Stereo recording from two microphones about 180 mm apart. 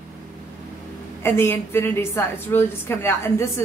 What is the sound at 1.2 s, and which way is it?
A woman's voice, 15° left (ahead or behind).